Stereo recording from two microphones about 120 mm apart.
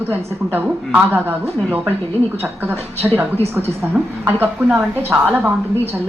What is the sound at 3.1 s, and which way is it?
A woman's voice, 15° right (ahead or behind).